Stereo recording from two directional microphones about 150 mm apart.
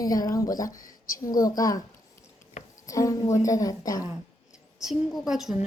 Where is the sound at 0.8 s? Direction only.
65° left (ahead or behind).